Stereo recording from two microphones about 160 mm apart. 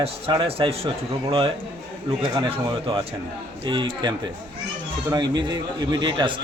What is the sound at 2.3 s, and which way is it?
A man's voice, 30° right (ahead or behind).